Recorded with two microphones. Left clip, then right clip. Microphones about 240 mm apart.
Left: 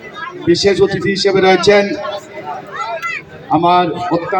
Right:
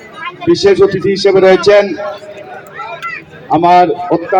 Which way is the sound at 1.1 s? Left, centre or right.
Left.